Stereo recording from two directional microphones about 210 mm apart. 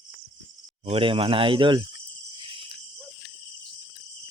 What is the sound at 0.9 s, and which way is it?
Speech, 25° right (ahead or behind).